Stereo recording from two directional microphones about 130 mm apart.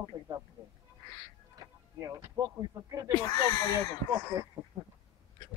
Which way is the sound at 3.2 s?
30° left (ahead or behind).